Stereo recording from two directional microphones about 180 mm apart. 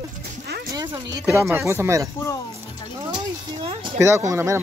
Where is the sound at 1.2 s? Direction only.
15° right (ahead or behind).